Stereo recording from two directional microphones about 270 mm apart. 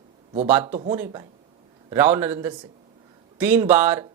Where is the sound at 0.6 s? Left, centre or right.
Right.